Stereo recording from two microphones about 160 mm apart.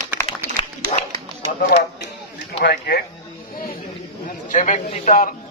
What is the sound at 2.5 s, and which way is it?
Speech, 90° left.